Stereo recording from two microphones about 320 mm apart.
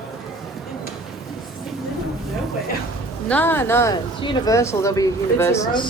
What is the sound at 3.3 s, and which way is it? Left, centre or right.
Speech, centre.